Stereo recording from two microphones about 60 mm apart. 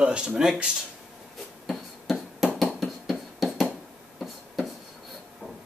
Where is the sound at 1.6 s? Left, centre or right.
Centre.